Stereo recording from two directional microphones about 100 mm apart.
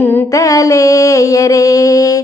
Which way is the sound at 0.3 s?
35° left (ahead or behind).